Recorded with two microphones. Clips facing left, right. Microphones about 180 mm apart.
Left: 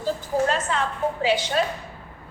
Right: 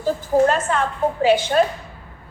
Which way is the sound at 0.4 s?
50° right (ahead or behind).